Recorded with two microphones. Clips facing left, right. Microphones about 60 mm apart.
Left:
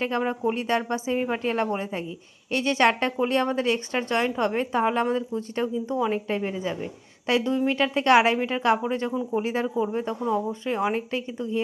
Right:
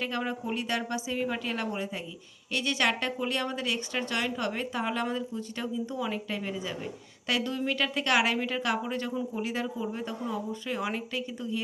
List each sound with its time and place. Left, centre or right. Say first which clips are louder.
0.2 s speech: left 6 dB; left